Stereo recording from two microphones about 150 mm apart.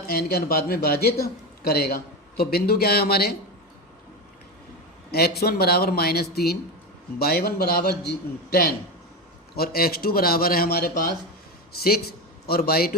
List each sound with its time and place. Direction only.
0.1 s a man's voice: 90° left
5.1 s a man's voice: 90° left